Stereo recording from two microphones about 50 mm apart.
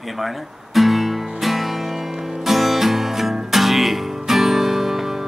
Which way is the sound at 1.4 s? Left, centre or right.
Centre.